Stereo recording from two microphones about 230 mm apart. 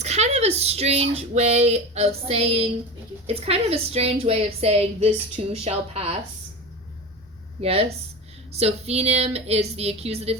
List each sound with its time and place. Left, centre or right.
0.0 s a woman's voice: right
7.6 s a woman's voice: right